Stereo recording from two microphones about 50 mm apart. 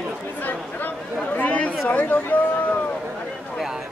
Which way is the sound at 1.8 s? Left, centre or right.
Left.